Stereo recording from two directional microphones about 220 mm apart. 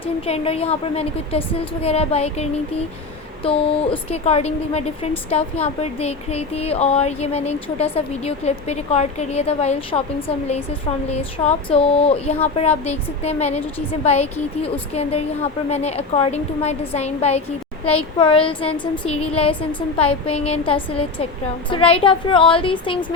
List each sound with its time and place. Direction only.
0.0 s speech: 25° left (ahead or behind)